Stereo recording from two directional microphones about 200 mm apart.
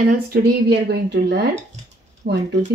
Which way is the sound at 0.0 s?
50° right (ahead or behind).